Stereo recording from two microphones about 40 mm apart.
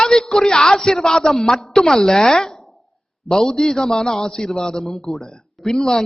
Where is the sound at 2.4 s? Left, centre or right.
Centre.